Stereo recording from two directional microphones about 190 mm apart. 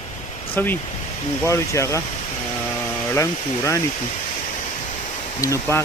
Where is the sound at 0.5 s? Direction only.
10° left (ahead or behind).